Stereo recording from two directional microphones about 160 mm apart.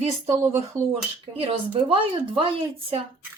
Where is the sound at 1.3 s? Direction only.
35° right (ahead or behind).